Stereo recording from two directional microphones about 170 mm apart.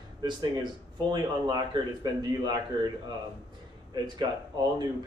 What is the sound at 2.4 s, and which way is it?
Speech, 25° right (ahead or behind).